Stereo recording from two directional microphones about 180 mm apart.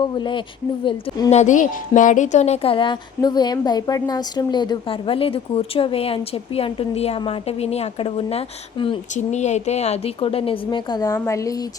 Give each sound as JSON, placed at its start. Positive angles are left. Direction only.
{"t": 0.0, "sound": "speech", "side_deg": 25}
{"t": 1.3, "sound": "a woman's voice", "side_deg": 40}